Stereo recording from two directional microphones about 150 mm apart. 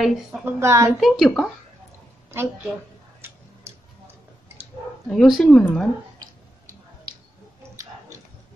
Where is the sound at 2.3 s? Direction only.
15° right (ahead or behind).